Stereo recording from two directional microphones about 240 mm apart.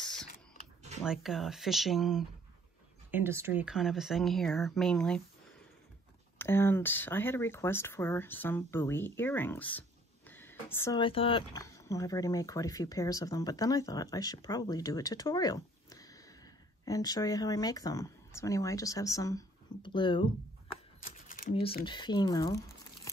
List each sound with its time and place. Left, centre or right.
1.0 s speech: centre
6.3 s speech: centre
21.0 s a sound: left
21.8 s speech: centre